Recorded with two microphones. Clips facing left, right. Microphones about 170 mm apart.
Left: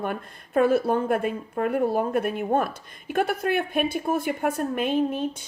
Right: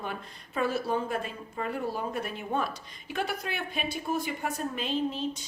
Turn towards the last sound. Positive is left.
turn(degrees=55)  # may be behind; listen again after turning